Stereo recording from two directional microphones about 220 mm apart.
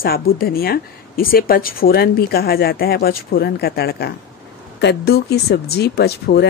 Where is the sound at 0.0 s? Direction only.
45° left (ahead or behind).